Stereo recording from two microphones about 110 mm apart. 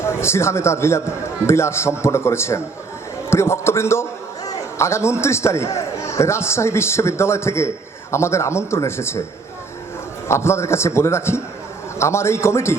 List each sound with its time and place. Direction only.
0.0 s a man's voice: 25° left (ahead or behind)
10.2 s a man's voice: 25° left (ahead or behind)